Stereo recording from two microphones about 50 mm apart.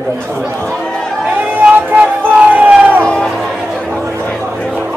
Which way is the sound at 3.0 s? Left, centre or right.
Centre.